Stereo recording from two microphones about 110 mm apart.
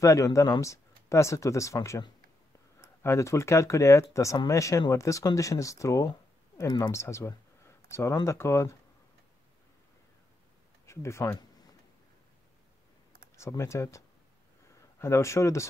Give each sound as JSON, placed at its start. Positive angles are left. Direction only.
{"t": 0.0, "sound": "speech", "side_deg": 30}
{"t": 10.9, "sound": "speech", "side_deg": 25}
{"t": 13.4, "sound": "speech", "side_deg": 25}